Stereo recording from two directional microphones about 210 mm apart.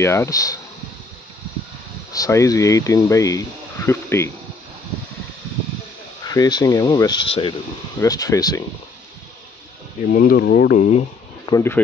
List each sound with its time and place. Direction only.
0.0 s speech: 10° left (ahead or behind)
2.1 s speech: 15° left (ahead or behind)
6.2 s speech: 20° left (ahead or behind)
10.1 s speech: 45° left (ahead or behind)
11.4 s speech: 15° left (ahead or behind)